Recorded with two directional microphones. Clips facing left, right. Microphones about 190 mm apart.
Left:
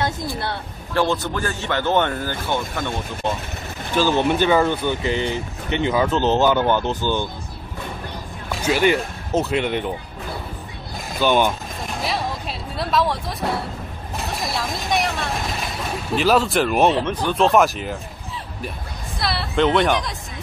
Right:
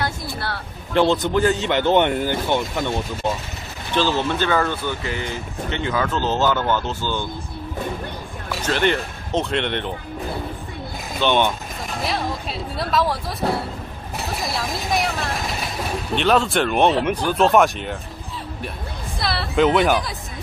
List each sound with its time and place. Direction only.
0.0 s speech: 20° left (ahead or behind)
0.9 s speech: 20° right (ahead or behind)
3.9 s speech: 15° left (ahead or behind)
8.6 s speech: 10° left (ahead or behind)
11.1 s speech: 5° left (ahead or behind)
17.0 s speech: 10° right (ahead or behind)
19.1 s a sound: centre (ahead or behind)